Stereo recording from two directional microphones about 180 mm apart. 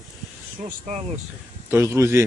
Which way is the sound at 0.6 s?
35° right (ahead or behind).